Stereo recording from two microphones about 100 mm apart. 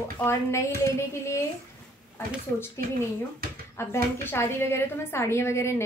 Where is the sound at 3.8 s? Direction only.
25° left (ahead or behind).